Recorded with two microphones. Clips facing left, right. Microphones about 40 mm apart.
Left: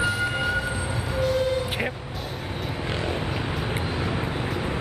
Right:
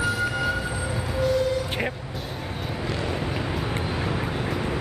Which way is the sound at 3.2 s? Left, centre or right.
Centre.